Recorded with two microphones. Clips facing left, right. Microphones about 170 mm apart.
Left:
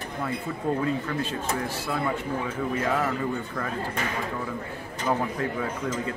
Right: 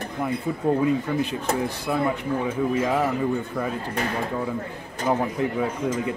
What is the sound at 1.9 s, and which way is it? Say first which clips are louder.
Speech: right 4 dB; 15° right (ahead or behind).